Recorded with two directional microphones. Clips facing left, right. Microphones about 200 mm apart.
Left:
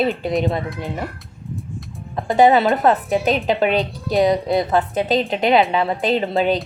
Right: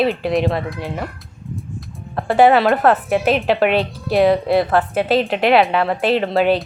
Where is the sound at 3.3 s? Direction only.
5° right (ahead or behind).